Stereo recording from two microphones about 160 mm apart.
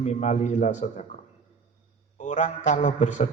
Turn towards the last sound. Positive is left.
turn(degrees=50)  # may be behind; listen again after turning